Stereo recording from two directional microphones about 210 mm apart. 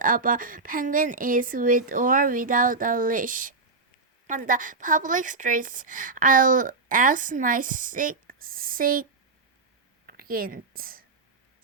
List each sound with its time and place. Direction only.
0.0 s a woman's voice: 40° right (ahead or behind)
10.1 s a woman's voice: 45° right (ahead or behind)